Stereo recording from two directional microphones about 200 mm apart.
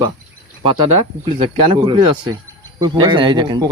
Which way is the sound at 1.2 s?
25° right (ahead or behind).